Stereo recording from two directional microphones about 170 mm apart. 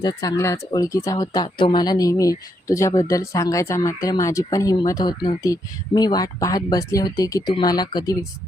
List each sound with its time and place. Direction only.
0.0 s speech: 25° left (ahead or behind)